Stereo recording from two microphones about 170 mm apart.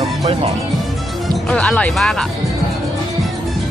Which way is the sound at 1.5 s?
5° left (ahead or behind).